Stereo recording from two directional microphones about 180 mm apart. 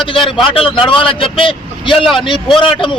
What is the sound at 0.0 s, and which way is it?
A man's voice, 30° left (ahead or behind).